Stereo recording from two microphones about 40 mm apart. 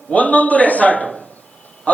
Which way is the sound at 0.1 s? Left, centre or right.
Left.